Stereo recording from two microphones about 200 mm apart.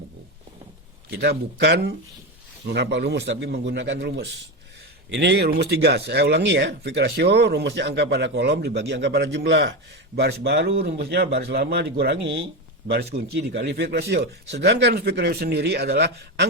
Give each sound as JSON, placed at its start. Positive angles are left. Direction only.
{"t": 1.2, "sound": "speech", "side_deg": -55}
{"t": 13.1, "sound": "speech", "side_deg": -40}
{"t": 13.5, "sound": "speech", "side_deg": -60}